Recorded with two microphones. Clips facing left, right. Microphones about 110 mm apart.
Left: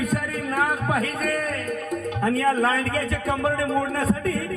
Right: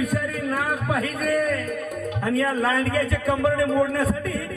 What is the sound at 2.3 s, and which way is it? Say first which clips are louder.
A man's voice: even; 40° left (ahead or behind).